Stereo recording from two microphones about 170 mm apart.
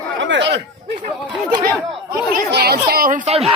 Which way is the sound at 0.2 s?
90° right.